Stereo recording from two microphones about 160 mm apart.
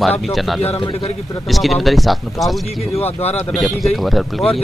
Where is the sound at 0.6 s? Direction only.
40° left (ahead or behind).